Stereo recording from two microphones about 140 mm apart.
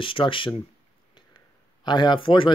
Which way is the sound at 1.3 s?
35° left (ahead or behind).